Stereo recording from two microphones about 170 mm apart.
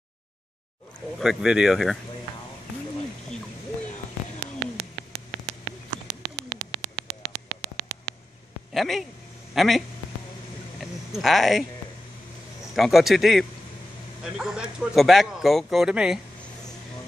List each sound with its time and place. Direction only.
1.2 s speech: centre (ahead or behind)
6.3 s bird: 25° right (ahead or behind)
8.7 s speech: centre (ahead or behind)
10.8 s a sound: centre (ahead or behind)
12.7 s speech: centre (ahead or behind)